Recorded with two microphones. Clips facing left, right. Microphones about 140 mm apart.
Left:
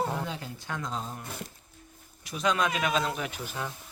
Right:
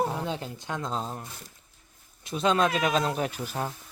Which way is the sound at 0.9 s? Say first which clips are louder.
Right 4 dB; 35° right (ahead or behind).